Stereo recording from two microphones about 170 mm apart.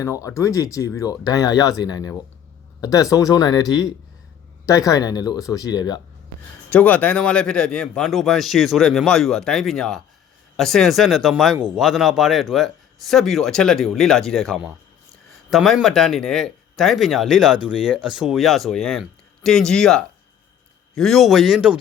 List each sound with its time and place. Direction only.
0.0 s speech: 20° left (ahead or behind)
6.7 s speech: 10° left (ahead or behind)